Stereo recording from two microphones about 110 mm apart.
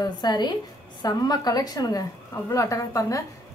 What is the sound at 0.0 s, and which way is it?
A woman's voice, 40° left (ahead or behind).